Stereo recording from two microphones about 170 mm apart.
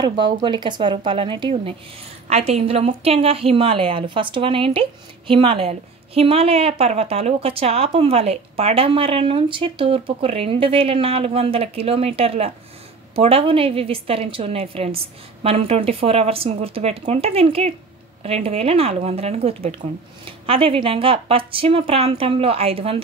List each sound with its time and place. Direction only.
0.0 s a woman's voice: 25° right (ahead or behind)